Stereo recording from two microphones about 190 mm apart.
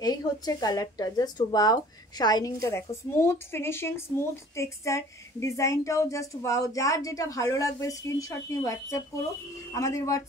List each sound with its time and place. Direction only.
0.0 s speech: 20° left (ahead or behind)